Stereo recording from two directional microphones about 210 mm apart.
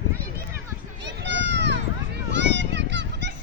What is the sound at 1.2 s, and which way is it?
Run, 55° right (ahead or behind).